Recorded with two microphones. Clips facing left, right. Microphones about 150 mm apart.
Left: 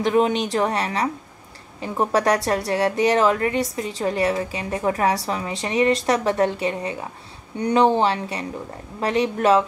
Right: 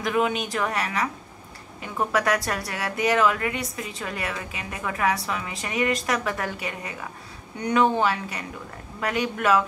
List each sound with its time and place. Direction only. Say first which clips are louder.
0.0 s a woman's voice: left 5 dB; 30° left (ahead or behind)